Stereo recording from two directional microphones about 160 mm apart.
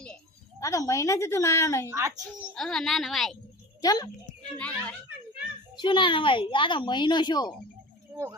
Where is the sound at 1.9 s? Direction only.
20° right (ahead or behind).